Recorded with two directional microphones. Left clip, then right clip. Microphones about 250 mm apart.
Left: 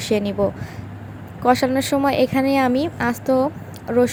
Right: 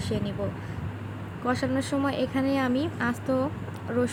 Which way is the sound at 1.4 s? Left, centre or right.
Left.